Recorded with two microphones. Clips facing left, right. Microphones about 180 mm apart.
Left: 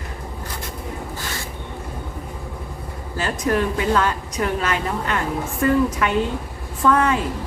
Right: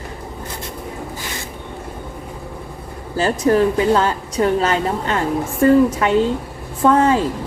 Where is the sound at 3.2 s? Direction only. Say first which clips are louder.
Right 6 dB; 30° right (ahead or behind).